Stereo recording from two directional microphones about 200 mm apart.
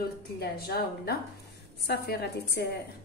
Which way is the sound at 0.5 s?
50° left (ahead or behind).